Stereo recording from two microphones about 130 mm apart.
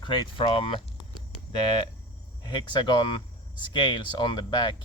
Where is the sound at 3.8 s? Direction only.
35° left (ahead or behind).